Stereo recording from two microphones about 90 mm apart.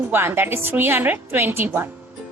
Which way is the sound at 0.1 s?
25° right (ahead or behind).